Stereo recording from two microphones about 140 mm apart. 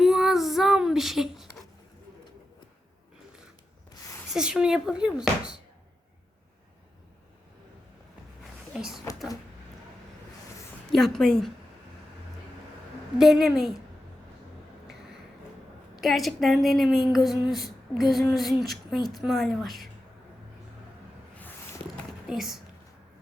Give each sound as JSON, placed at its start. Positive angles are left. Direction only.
{"t": 0.0, "sound": "child singing", "side_deg": -5}
{"t": 4.3, "sound": "a woman's voice", "side_deg": -5}
{"t": 9.1, "sound": "speech", "side_deg": 25}
{"t": 10.9, "sound": "a woman's voice", "side_deg": 0}
{"t": 13.1, "sound": "a woman's voice", "side_deg": 0}
{"t": 16.0, "sound": "a woman's voice", "side_deg": 0}
{"t": 17.2, "sound": "a sound", "side_deg": 0}
{"t": 18.1, "sound": "a woman's voice", "side_deg": 0}
{"t": 21.3, "sound": "a sound", "side_deg": 15}
{"t": 22.3, "sound": "a woman's voice", "side_deg": -5}